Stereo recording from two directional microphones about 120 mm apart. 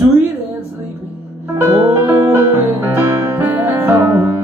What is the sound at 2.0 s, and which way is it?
Music, 20° right (ahead or behind).